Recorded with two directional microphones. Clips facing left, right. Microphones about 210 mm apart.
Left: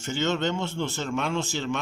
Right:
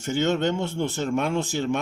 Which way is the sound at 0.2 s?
55° right (ahead or behind).